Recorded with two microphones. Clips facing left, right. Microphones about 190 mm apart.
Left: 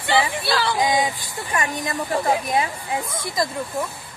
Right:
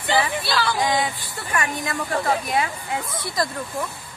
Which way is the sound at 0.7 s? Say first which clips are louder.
Left 2 dB; 15° left (ahead or behind).